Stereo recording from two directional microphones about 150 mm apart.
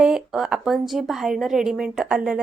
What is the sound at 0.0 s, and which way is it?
Speech, 5° right (ahead or behind).